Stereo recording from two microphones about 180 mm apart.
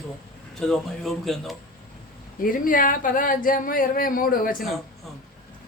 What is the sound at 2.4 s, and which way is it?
A woman's voice, 50° left (ahead or behind).